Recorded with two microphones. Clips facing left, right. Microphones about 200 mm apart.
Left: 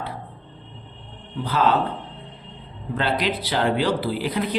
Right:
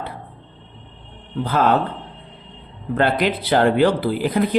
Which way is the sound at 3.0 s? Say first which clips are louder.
Right 5 dB; 50° right (ahead or behind).